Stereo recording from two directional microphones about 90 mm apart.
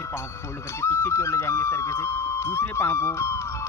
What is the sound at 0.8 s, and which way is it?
Speech, 30° left (ahead or behind).